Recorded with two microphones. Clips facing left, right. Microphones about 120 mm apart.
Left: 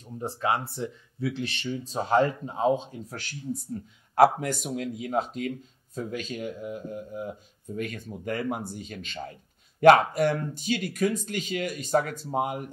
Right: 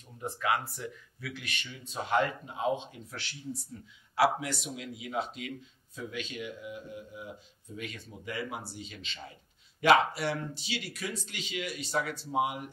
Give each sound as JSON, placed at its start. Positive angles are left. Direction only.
{"t": 0.2, "sound": "speech", "side_deg": 30}